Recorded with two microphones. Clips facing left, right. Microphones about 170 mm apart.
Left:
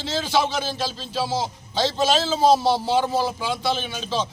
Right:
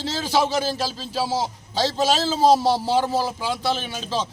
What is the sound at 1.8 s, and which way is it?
Speech, 5° right (ahead or behind).